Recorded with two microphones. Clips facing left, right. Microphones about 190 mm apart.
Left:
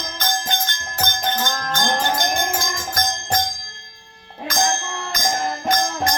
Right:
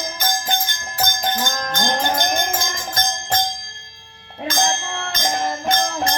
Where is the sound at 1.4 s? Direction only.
20° right (ahead or behind).